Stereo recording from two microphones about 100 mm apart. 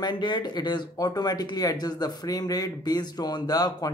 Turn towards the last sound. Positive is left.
turn(degrees=40)  # may be behind; listen again after turning